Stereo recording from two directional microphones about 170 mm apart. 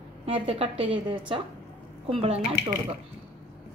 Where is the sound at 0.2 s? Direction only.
35° right (ahead or behind).